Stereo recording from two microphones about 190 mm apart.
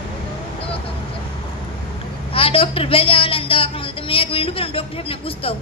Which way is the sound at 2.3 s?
30° left (ahead or behind).